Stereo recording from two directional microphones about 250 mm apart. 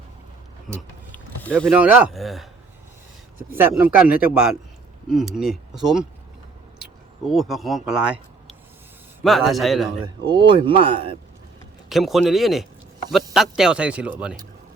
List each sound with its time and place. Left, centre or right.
1.1 s speech: centre
3.5 s speech: centre
7.3 s speech: centre
7.9 s a sound: centre
9.2 s speech: centre
10.2 s speech: centre
11.9 s speech: centre